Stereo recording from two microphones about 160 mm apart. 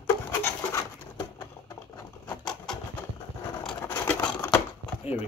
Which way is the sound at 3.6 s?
10° left (ahead or behind).